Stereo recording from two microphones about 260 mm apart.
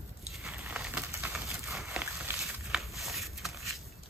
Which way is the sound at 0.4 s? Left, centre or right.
Centre.